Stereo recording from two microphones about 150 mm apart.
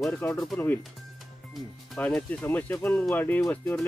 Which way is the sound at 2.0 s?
10° left (ahead or behind).